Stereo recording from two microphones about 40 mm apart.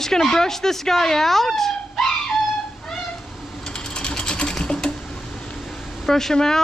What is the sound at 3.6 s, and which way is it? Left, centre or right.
Sewing machine, left.